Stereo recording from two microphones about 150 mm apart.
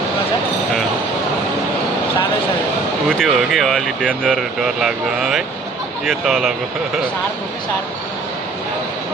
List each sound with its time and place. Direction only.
3.1 s speech: 5° left (ahead or behind)